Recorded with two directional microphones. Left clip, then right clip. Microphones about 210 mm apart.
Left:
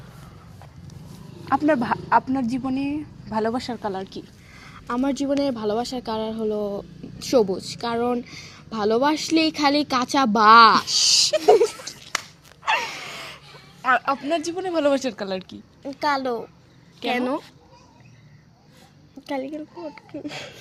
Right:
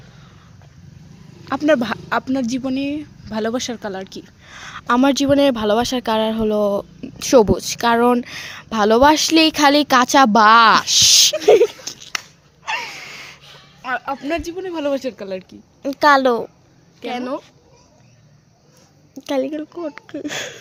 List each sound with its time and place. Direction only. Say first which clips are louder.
1.5 s speech: right 3 dB; 35° right (ahead or behind)
4.5 s speech: right 10 dB; 40° right (ahead or behind)
11.9 s a sound: right 5 dB; 40° right (ahead or behind)
12.6 s gasp: left 2 dB; centre (ahead or behind)
13.8 s a woman's voice: left 3 dB; 5° left (ahead or behind)
15.8 s speech: right 10 dB; 45° right (ahead or behind)
17.0 s speech: left 1 dB; 10° left (ahead or behind)
19.1 s speech: right 8 dB; 45° right (ahead or behind)